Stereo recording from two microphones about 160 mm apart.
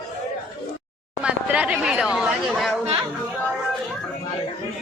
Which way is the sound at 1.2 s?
5° right (ahead or behind).